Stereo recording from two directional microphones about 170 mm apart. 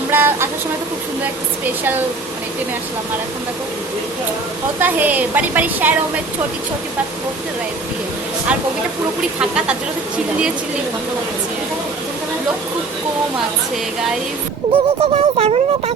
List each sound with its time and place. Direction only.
0.1 s a woman's voice: 10° right (ahead or behind)
4.8 s a woman's voice: 10° right (ahead or behind)
14.7 s speech: 35° right (ahead or behind)